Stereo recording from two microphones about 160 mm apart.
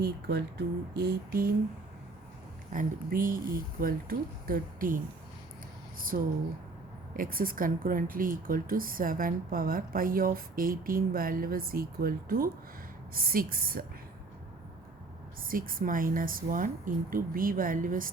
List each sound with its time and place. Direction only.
0.0 s speech: 90° right; by 1.5 s 70° right (ahead or behind)
2.7 s speech: 60° right (ahead or behind)
6.1 s speech: 70° right (ahead or behind)
15.4 s speech: 60° right (ahead or behind)